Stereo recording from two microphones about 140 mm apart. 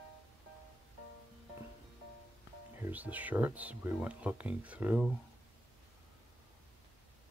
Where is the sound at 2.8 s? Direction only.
10° right (ahead or behind).